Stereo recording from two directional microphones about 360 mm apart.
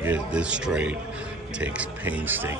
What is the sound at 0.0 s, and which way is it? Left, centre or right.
A man's voice, centre.